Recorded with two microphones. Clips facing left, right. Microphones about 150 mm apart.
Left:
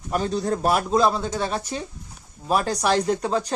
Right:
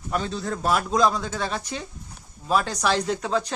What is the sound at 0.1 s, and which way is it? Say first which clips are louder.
Speech: left 4 dB; 40° left (ahead or behind).